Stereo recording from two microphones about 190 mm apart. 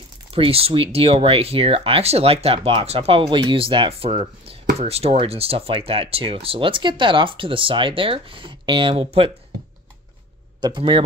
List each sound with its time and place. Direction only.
0.3 s speech: 30° right (ahead or behind)
10.6 s speech: 25° right (ahead or behind)